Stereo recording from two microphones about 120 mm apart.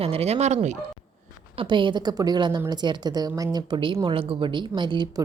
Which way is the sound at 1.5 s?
45° right (ahead or behind).